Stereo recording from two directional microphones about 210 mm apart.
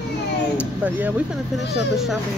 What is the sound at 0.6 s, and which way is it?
Speech, 5° right (ahead or behind).